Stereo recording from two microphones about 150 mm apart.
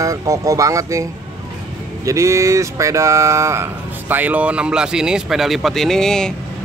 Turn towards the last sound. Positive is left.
turn(degrees=5)  # may be behind; listen again after turning